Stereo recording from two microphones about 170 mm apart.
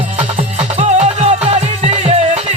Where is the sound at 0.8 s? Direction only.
40° right (ahead or behind).